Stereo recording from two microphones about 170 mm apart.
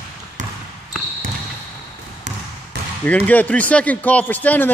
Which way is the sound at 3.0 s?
10° left (ahead or behind).